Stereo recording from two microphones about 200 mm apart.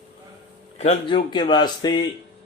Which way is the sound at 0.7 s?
35° left (ahead or behind).